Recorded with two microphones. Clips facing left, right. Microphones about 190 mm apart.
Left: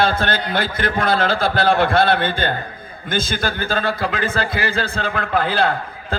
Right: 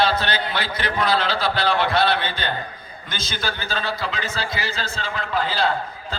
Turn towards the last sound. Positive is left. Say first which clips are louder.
# left 3 dB
turn(degrees=55)  # may be behind; listen again after turning